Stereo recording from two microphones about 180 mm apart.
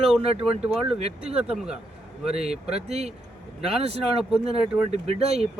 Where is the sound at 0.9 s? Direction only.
35° right (ahead or behind).